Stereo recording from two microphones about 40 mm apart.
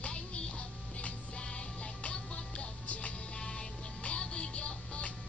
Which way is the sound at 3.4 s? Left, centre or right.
Left.